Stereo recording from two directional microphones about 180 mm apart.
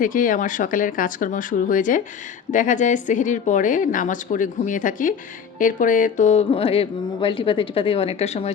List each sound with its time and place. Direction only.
0.0 s a woman's voice: 50° left (ahead or behind)